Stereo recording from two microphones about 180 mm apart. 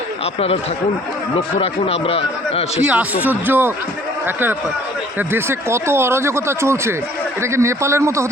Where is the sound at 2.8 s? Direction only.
10° right (ahead or behind).